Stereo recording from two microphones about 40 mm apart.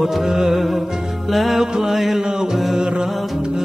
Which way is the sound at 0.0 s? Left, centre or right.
Centre.